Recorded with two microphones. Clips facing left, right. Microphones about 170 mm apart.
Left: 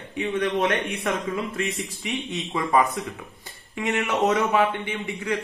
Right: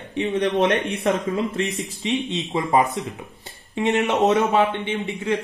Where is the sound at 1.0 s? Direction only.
25° right (ahead or behind).